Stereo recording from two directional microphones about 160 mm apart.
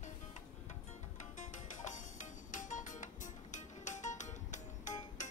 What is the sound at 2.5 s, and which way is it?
Music, 50° left (ahead or behind).